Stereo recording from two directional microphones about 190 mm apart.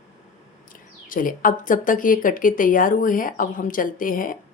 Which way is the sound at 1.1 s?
45° left (ahead or behind).